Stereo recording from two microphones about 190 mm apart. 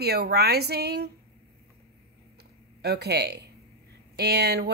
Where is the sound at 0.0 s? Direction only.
60° right (ahead or behind).